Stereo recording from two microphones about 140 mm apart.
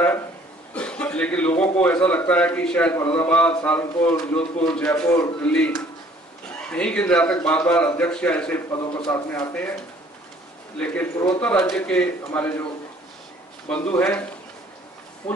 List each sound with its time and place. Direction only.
0.7 s a man's voice: 5° left (ahead or behind)
6.7 s a man's voice: 10° left (ahead or behind)
10.8 s a man's voice: 10° left (ahead or behind)
13.7 s a man's voice: 10° left (ahead or behind)
15.2 s speech: 10° left (ahead or behind)